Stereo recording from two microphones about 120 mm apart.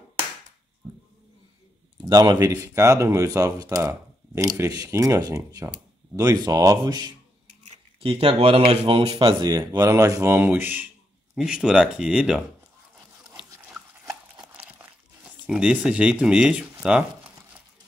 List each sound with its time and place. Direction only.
2.0 s speech: 35° right (ahead or behind)
8.0 s speech: 50° right (ahead or behind); by 10.9 s 15° right (ahead or behind)
11.3 s speech: 5° right (ahead or behind)
15.4 s speech: 5° right (ahead or behind)